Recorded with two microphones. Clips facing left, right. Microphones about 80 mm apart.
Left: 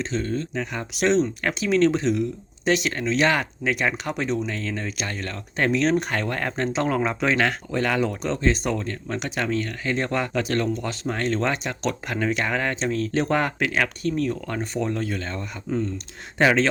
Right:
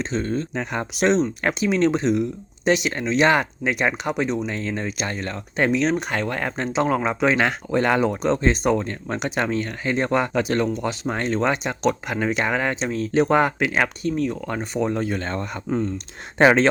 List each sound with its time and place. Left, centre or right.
0.0 s speech: right
0.9 s speech: right
15.2 s a man's voice: right
16.4 s a man's voice: right